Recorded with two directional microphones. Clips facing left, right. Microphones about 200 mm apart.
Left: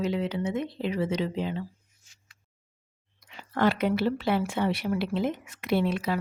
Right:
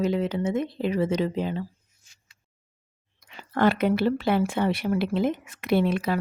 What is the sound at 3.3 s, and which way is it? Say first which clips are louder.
Speech: right 3 dB; 55° right (ahead or behind).